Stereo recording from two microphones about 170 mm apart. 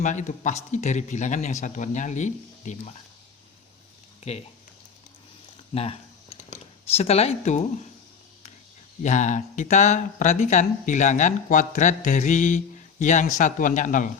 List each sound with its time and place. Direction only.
0.0 s speech: 45° left (ahead or behind)
4.3 s speech: 40° left (ahead or behind)
5.7 s a sound: 35° left (ahead or behind)
9.0 s speech: 45° left (ahead or behind)